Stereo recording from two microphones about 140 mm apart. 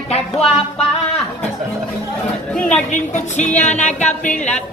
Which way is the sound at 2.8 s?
60° left (ahead or behind).